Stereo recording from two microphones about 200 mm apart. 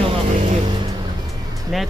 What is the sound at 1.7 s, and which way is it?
Speech, centre (ahead or behind).